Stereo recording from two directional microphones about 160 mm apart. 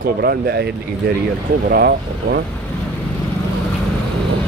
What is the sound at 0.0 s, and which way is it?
Speech, 70° right (ahead or behind).